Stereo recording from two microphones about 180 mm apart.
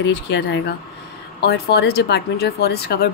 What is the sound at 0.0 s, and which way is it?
Speech, 75° left (ahead or behind).